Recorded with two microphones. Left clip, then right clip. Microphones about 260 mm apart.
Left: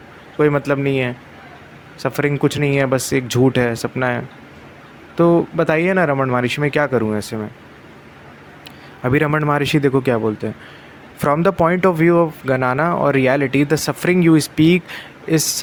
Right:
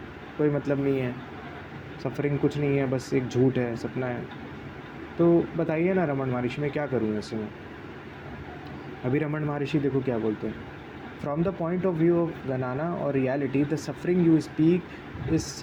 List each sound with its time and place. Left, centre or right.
0.3 s speech: left
5.5 s speech: left
9.0 s speech: left
11.2 s speech: left